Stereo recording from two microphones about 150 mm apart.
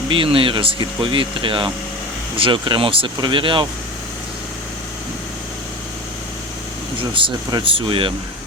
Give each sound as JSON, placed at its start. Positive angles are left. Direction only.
{"t": 0.1, "sound": "speech", "side_deg": -35}
{"t": 7.0, "sound": "speech", "side_deg": -35}